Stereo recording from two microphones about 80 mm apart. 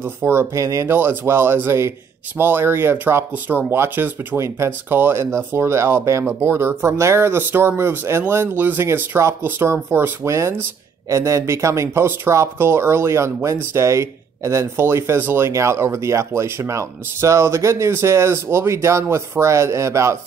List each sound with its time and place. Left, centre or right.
0.0 s speech: right